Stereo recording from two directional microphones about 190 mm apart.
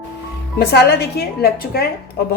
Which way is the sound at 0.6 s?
60° left (ahead or behind).